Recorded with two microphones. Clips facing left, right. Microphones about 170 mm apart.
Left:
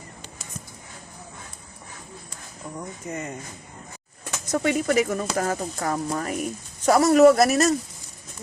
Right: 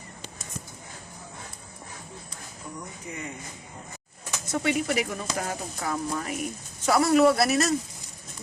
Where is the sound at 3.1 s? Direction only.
45° left (ahead or behind).